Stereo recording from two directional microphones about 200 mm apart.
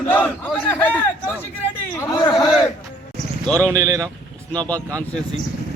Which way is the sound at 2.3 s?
Centre (ahead or behind).